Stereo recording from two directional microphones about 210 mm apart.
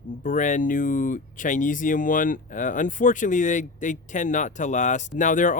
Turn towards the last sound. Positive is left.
turn(degrees=40)  # may be behind; listen again after turning